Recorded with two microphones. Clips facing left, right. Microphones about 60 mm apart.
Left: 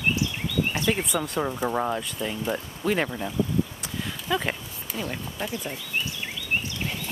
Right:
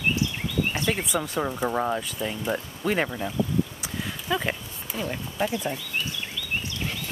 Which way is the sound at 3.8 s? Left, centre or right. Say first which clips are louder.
Even; centre.